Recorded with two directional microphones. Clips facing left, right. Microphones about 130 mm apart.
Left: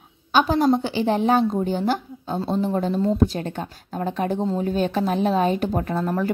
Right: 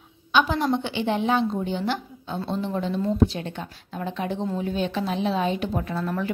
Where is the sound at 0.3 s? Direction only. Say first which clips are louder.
Left 4 dB; 40° left (ahead or behind).